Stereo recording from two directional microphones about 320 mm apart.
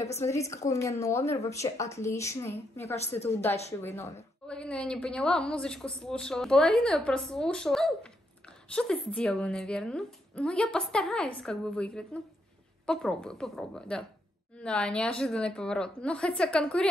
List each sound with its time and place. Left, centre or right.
0.0 s a woman's voice: centre
2.8 s a woman's voice: centre
3.8 s a woman's voice: centre